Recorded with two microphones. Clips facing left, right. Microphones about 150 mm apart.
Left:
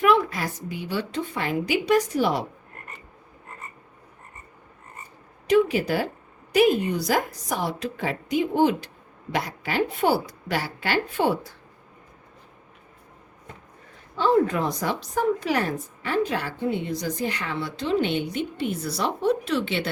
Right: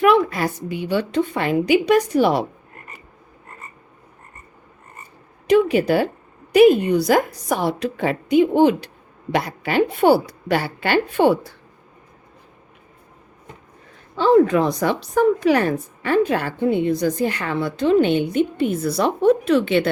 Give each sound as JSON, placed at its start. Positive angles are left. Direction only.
{"t": 0.0, "sound": "a woman's voice", "side_deg": -65}
{"t": 5.5, "sound": "a woman's voice", "side_deg": -65}
{"t": 14.2, "sound": "a woman's voice", "side_deg": -85}